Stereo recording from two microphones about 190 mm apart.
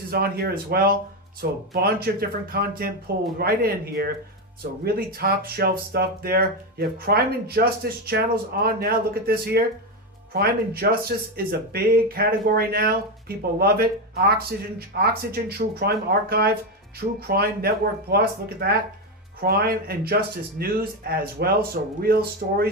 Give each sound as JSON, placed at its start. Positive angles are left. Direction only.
{"t": 0.1, "sound": "speech", "side_deg": -55}